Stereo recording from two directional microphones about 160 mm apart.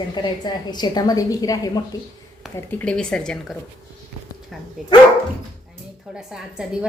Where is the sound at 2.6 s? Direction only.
10° left (ahead or behind).